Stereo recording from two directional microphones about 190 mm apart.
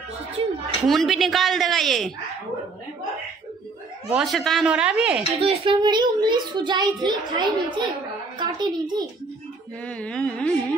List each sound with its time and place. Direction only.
0.8 s a woman's voice: centre (ahead or behind)
4.1 s a woman's voice: centre (ahead or behind)
5.4 s a child's voice: 30° right (ahead or behind)
9.8 s mantra: 5° left (ahead or behind)